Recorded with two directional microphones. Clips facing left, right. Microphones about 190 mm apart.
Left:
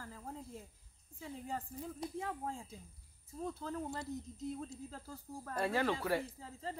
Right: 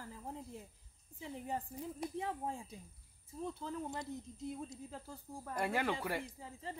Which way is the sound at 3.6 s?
15° right (ahead or behind).